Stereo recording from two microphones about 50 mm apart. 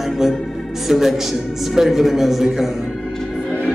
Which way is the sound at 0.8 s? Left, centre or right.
Centre.